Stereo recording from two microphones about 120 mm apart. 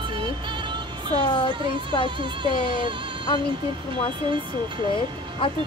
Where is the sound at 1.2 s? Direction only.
40° left (ahead or behind).